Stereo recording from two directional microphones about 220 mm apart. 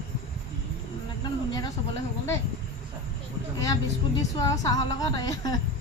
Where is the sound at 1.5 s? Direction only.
20° left (ahead or behind).